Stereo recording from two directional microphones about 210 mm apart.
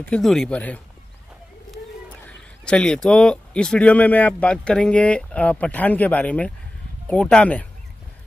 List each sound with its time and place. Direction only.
0.0 s speech: 5° left (ahead or behind)
2.2 s a man's voice: 5° left (ahead or behind)